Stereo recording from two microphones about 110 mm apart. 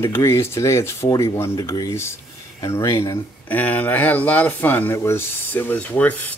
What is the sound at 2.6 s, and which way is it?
Speech, 25° left (ahead or behind).